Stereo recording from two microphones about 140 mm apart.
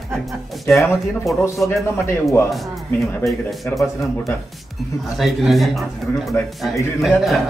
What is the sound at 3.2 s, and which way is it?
Speech, centre (ahead or behind).